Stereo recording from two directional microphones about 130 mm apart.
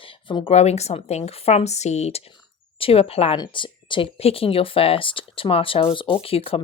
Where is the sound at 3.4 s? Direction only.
40° left (ahead or behind).